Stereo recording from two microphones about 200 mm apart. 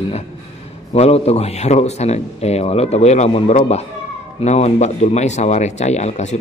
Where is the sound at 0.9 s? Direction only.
30° left (ahead or behind).